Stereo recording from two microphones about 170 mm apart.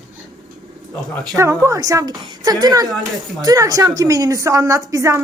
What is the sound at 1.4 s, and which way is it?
A woman's voice, 20° right (ahead or behind).